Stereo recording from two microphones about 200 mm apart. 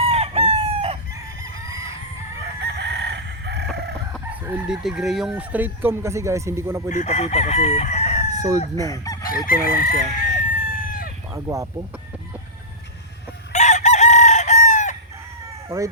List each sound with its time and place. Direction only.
0.0 s chicken: 30° right (ahead or behind)
2.4 s chicken: 60° right (ahead or behind)
4.4 s speech: 5° right (ahead or behind)
6.9 s chicken: 35° left (ahead or behind)
8.3 s chicken: 15° right (ahead or behind)
9.5 s chicken: 45° left (ahead or behind)
11.3 s speech: 15° right (ahead or behind)
13.5 s chicken: 35° left (ahead or behind)